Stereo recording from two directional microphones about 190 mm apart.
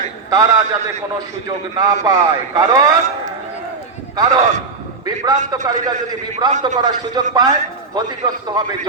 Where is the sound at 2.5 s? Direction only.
20° right (ahead or behind).